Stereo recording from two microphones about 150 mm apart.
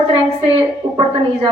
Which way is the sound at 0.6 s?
35° right (ahead or behind).